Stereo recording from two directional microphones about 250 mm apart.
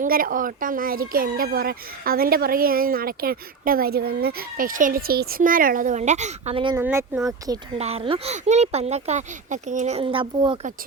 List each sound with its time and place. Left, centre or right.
0.0 s speech: right
6.7 s speech: centre
7.8 s speech: right